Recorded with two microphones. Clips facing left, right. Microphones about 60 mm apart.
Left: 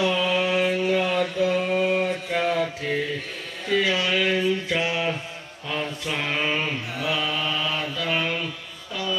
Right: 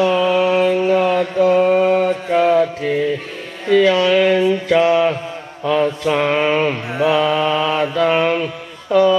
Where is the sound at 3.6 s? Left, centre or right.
Right.